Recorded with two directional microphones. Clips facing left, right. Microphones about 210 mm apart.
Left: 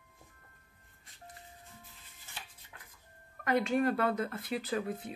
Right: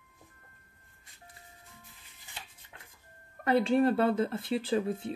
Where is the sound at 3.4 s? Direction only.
30° right (ahead or behind).